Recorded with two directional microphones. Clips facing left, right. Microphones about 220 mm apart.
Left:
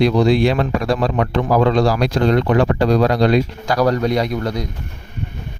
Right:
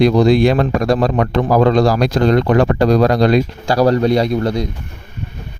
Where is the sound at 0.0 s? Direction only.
45° right (ahead or behind).